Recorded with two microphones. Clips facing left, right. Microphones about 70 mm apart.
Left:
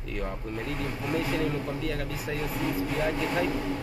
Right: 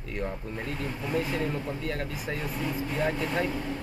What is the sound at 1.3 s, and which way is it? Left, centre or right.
Speech, right.